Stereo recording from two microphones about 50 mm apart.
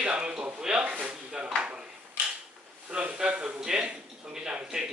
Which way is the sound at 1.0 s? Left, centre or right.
Centre.